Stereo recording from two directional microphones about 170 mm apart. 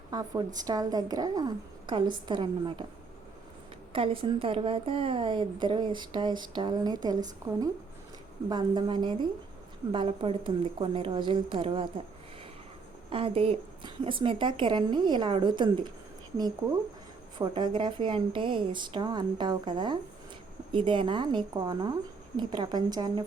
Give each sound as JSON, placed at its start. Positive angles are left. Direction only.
{"t": 0.1, "sound": "a woman's voice", "side_deg": -25}
{"t": 3.9, "sound": "a woman's voice", "side_deg": -30}
{"t": 13.1, "sound": "a woman's voice", "side_deg": -30}
{"t": 17.3, "sound": "a woman's voice", "side_deg": -25}